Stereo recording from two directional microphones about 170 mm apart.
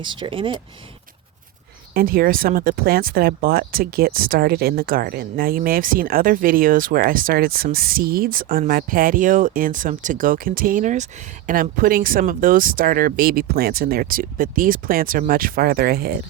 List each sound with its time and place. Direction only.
0.0 s speech: 30° right (ahead or behind)
1.9 s speech: 60° right (ahead or behind)